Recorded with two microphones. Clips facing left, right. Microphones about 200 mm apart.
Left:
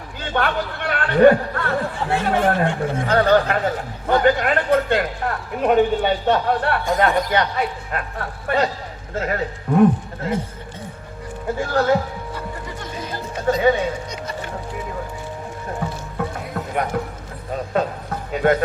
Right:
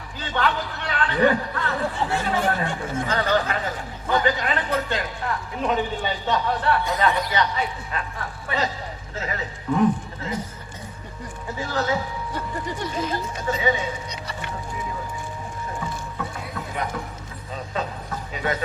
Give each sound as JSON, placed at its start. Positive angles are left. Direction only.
{"t": 0.2, "sound": "a man's voice", "side_deg": 55}
{"t": 11.4, "sound": "a man's voice", "side_deg": 55}
{"t": 13.6, "sound": "speech", "side_deg": 55}
{"t": 15.8, "sound": "music", "side_deg": 50}
{"t": 17.5, "sound": "a sound", "side_deg": 55}